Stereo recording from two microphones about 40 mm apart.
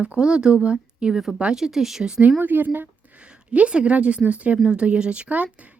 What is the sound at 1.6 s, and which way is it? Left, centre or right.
Speech, centre.